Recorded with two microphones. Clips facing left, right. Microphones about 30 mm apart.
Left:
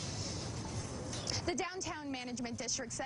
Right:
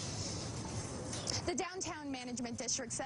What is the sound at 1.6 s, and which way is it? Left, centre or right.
Speech, centre.